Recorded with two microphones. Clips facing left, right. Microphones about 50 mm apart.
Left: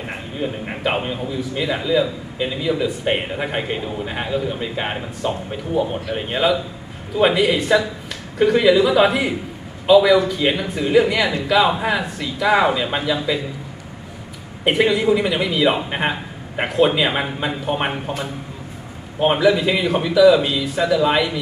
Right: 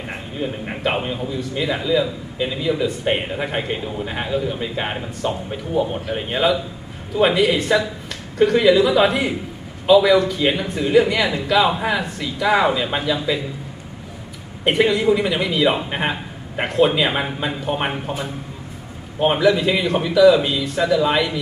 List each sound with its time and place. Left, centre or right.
0.1 s a man's voice: centre
14.6 s a man's voice: centre
19.1 s a man's voice: centre